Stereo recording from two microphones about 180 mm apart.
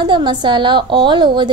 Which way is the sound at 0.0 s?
25° right (ahead or behind).